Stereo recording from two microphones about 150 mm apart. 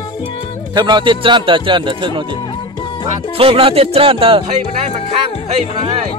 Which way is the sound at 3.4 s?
35° right (ahead or behind).